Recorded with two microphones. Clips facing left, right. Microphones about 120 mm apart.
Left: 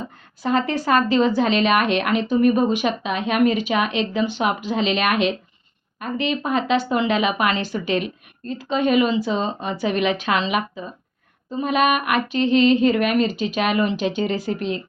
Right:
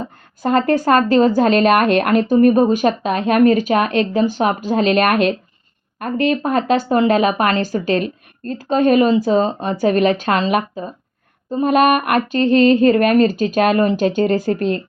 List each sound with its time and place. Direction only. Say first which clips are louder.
0.4 s speech: right 6 dB; 45° right (ahead or behind)